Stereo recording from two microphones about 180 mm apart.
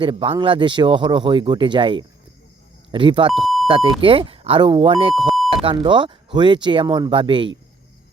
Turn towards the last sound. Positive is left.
turn(degrees=-30)  # may be behind; listen again after turning